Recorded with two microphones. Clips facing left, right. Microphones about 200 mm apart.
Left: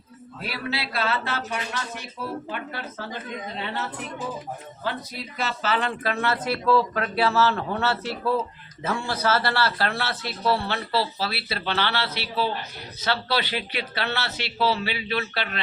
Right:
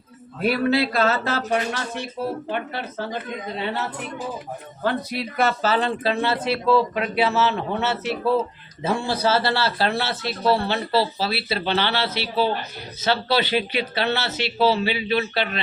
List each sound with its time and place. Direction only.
0.4 s speech: 50° right (ahead or behind)
2.2 s speech: 65° right (ahead or behind)
5.1 s speech: 60° right (ahead or behind)
5.6 s speech: 35° right (ahead or behind)